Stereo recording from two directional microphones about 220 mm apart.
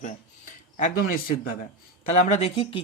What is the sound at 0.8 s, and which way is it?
Speech, 40° left (ahead or behind).